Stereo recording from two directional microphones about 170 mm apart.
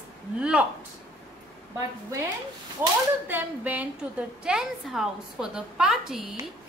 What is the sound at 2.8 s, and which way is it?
Speech, 10° right (ahead or behind).